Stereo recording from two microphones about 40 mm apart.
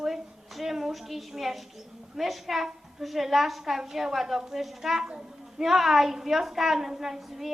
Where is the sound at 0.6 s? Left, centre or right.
Centre.